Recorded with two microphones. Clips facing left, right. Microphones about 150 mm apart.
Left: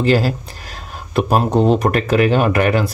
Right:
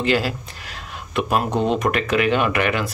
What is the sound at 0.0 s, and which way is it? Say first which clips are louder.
Speech: left 5 dB; 40° left (ahead or behind).